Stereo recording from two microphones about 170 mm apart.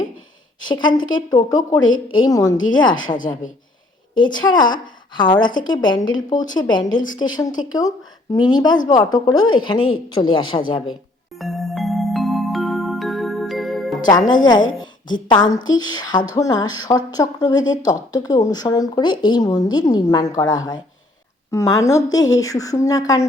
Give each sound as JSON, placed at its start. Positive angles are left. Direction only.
{"t": 0.7, "sound": "speech", "side_deg": 25}
{"t": 3.1, "sound": "a woman's voice", "side_deg": 50}
{"t": 4.1, "sound": "speech", "side_deg": 25}
{"t": 11.3, "sound": "music", "side_deg": 0}
{"t": 15.0, "sound": "speech", "side_deg": 25}